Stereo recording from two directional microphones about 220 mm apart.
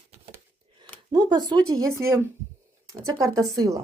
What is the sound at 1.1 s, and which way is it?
Speech, 20° right (ahead or behind).